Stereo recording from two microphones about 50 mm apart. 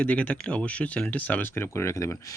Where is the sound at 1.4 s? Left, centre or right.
Left.